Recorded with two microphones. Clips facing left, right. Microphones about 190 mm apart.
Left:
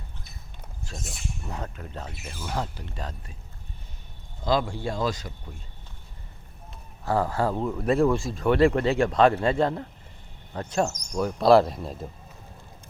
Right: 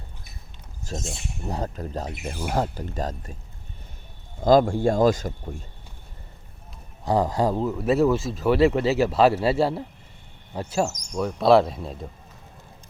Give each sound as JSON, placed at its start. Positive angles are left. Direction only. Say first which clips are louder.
{"t": 0.9, "sound": "speech", "louder": "right 5 dB", "side_deg": -25}
{"t": 4.4, "sound": "speech", "louder": "right 8 dB", "side_deg": -45}
{"t": 7.0, "sound": "speech", "louder": "right 3 dB", "side_deg": -15}
{"t": 7.6, "sound": "speech", "louder": "even", "side_deg": -5}